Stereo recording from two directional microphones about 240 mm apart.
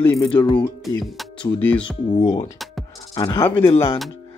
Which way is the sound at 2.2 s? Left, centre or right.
Left.